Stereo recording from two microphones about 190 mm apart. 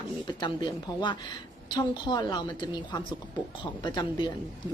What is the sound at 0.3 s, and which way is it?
A woman's voice, 25° left (ahead or behind).